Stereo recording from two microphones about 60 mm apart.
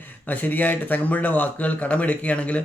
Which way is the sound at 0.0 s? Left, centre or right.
Left.